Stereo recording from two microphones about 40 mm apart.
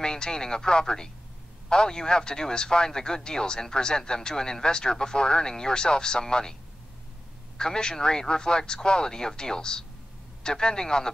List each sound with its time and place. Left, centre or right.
0.0 s speech: centre
7.5 s speech: centre